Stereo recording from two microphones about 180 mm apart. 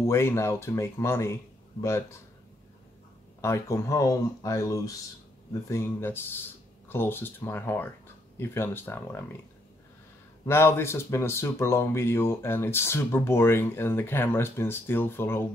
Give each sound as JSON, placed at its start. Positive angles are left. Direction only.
{"t": 0.0, "sound": "speech", "side_deg": 15}
{"t": 3.3, "sound": "speech", "side_deg": 15}
{"t": 10.4, "sound": "speech", "side_deg": 15}